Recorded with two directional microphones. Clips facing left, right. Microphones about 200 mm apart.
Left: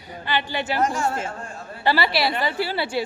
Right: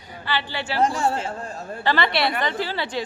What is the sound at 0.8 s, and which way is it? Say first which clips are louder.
Speech: right 3 dB; 35° right (ahead or behind).